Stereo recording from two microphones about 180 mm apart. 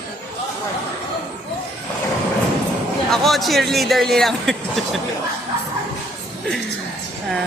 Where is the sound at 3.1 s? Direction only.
Centre (ahead or behind).